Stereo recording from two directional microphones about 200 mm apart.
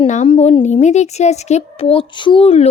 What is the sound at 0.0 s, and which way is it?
A woman's voice, 35° left (ahead or behind).